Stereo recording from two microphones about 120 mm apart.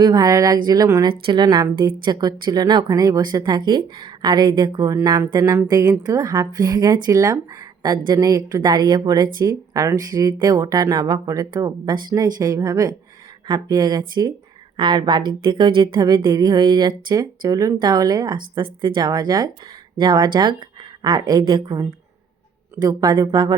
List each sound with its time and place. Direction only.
0.0 s speech: 35° right (ahead or behind)
1.0 s a woman's voice: 40° right (ahead or behind)